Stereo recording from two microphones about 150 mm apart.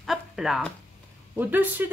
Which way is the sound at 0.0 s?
Centre (ahead or behind).